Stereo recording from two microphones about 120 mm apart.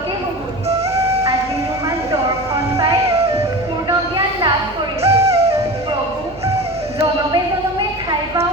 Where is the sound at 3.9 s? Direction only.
40° right (ahead or behind).